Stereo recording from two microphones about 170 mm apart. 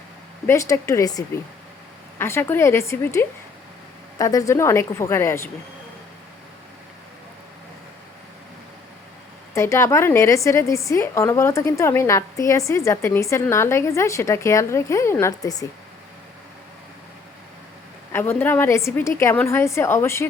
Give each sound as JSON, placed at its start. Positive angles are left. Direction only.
{"t": 0.4, "sound": "a woman's voice", "side_deg": 15}
{"t": 9.6, "sound": "a woman's voice", "side_deg": 15}
{"t": 18.1, "sound": "a woman's voice", "side_deg": 15}